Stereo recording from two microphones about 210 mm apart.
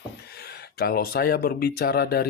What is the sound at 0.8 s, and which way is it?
Speech, 45° left (ahead or behind).